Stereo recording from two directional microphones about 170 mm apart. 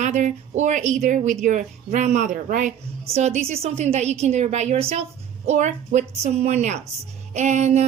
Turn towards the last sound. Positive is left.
turn(degrees=-40)  # may be behind; listen again after turning